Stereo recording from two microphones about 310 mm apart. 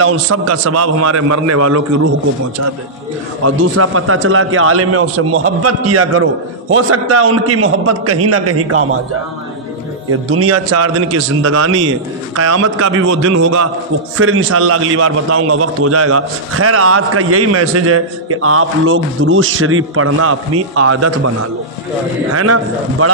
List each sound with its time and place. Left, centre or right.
0.0 s a man's voice: right
3.4 s a man's voice: right
10.2 s a man's voice: right
22.3 s a man's voice: right